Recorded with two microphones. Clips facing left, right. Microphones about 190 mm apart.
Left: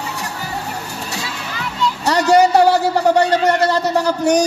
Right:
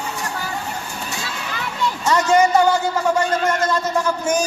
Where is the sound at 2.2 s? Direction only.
70° left (ahead or behind).